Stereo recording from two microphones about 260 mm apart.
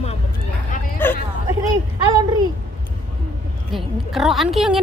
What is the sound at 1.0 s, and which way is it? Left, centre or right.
Hubbub, centre.